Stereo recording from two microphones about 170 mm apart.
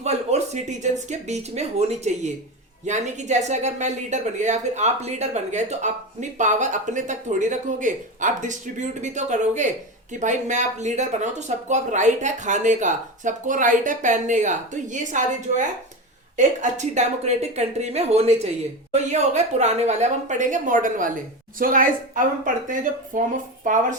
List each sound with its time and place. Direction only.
0.0 s a woman's voice: 40° right (ahead or behind)